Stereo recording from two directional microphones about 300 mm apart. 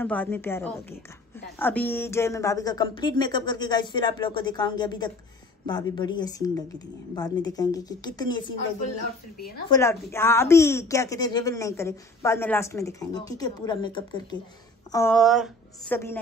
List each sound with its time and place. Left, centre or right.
0.0 s a woman's voice: centre
9.4 s a woman's voice: left
9.7 s a woman's voice: centre